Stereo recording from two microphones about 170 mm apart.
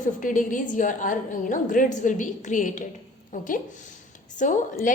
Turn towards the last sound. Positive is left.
turn(degrees=50)  # may be behind; listen again after turning